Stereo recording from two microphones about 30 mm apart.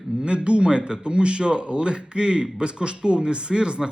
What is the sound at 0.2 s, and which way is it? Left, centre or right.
Speech, right.